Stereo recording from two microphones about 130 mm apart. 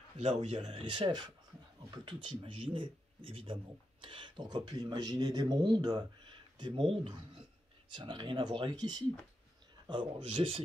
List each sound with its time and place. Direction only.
0.2 s speech: 55° right (ahead or behind)